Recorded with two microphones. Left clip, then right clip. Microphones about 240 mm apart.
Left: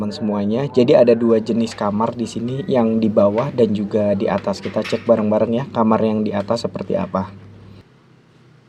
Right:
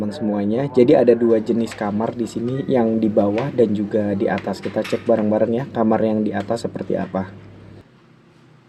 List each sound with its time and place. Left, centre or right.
0.0 s speech: left